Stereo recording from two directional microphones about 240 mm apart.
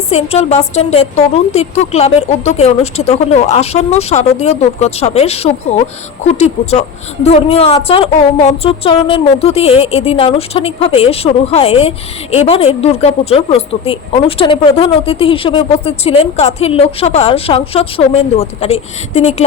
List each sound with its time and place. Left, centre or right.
0.1 s a woman's voice: left